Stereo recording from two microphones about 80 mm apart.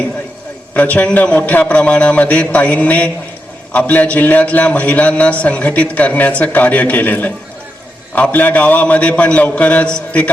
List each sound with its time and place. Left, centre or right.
0.7 s a man's voice: centre